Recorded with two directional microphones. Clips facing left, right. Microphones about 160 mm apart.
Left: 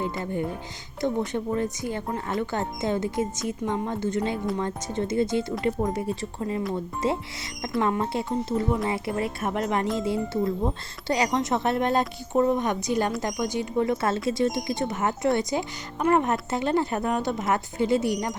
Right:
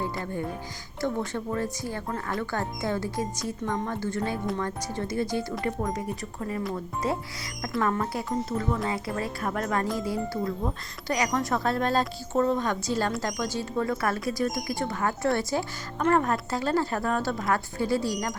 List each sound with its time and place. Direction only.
1.0 s speech: 20° left (ahead or behind)